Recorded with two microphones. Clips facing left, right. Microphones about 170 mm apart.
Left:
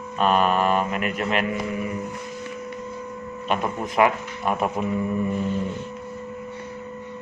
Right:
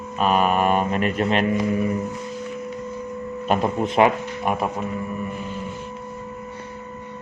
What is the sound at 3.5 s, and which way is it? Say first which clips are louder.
Speech: right 4 dB; 40° right (ahead or behind).